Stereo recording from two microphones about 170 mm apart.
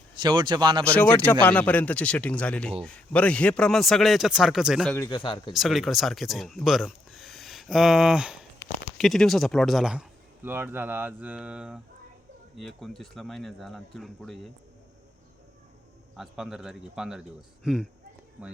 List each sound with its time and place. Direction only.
0.2 s speech: 25° right (ahead or behind)
0.9 s speech: 10° left (ahead or behind)
4.9 s speech: 20° left (ahead or behind)
5.5 s speech: centre (ahead or behind)
16.1 s speech: centre (ahead or behind)